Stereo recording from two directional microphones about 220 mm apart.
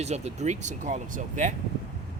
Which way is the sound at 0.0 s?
30° right (ahead or behind).